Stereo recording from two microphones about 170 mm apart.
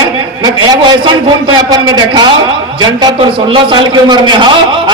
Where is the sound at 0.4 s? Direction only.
25° right (ahead or behind).